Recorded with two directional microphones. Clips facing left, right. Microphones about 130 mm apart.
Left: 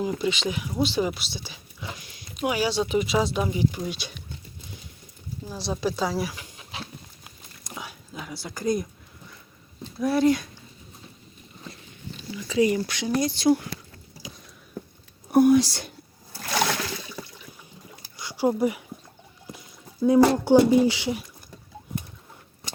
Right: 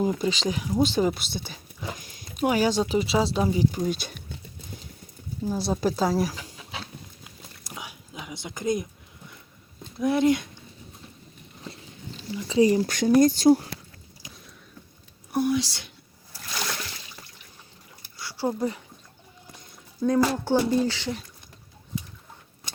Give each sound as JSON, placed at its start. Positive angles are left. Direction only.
{"t": 0.0, "sound": "speech", "side_deg": -40}
{"t": 2.9, "sound": "speech", "side_deg": -30}
{"t": 5.8, "sound": "speech", "side_deg": -45}
{"t": 7.6, "sound": "whispering", "side_deg": -15}
{"t": 10.0, "sound": "speech", "side_deg": -20}
{"t": 12.3, "sound": "speech", "side_deg": -30}
{"t": 15.3, "sound": "a sound", "side_deg": 50}
{"t": 16.4, "sound": "a sound", "side_deg": 80}
{"t": 18.2, "sound": "a sound", "side_deg": 15}
{"t": 20.3, "sound": "speech", "side_deg": 15}